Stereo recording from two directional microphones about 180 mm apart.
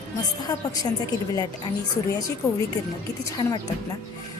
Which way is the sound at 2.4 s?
15° left (ahead or behind).